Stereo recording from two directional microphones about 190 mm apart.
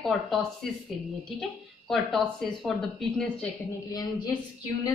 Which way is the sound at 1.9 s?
Centre (ahead or behind).